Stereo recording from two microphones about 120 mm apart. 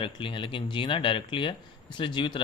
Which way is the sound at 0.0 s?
45° left (ahead or behind).